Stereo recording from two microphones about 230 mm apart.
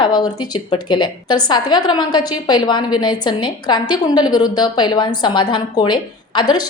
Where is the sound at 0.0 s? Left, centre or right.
Centre.